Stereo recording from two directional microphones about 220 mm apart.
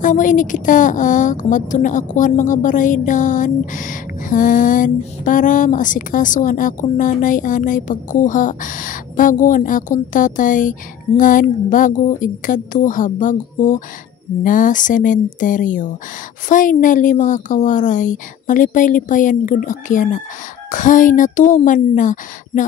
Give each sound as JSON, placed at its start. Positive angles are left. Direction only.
{"t": 0.0, "sound": "a woman's voice", "side_deg": 35}